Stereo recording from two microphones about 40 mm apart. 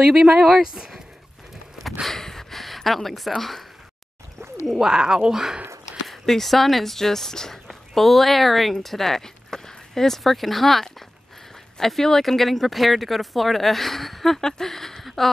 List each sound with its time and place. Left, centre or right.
0.0 s speech: centre
2.0 s speech: centre
4.7 s speech: centre
6.0 s speech: centre
15.0 s a sound: centre